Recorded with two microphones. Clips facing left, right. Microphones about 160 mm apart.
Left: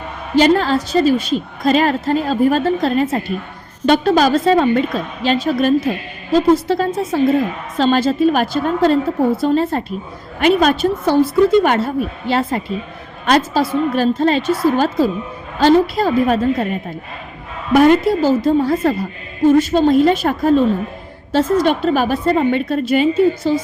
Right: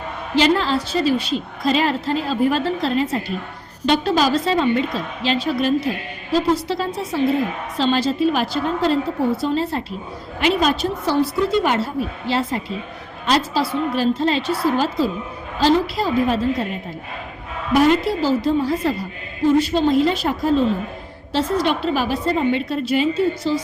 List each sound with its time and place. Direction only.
0.3 s a woman's voice: 45° left (ahead or behind)
17.7 s a woman's voice: 50° left (ahead or behind)